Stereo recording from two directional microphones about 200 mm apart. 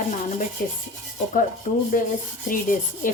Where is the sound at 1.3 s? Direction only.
40° left (ahead or behind).